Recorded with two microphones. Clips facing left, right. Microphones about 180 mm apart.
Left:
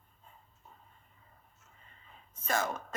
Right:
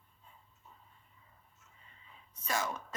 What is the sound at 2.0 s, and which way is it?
Whispering, 50° left (ahead or behind).